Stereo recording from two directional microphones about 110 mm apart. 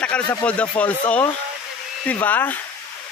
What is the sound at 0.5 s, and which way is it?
Speech, 15° left (ahead or behind).